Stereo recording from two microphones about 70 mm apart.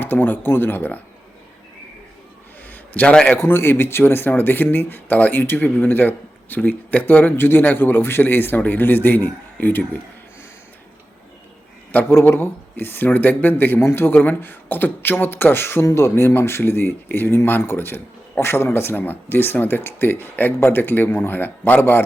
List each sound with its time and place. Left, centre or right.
0.0 s speech: left
2.6 s a sound: left
3.3 s speech: left
11.9 s speech: left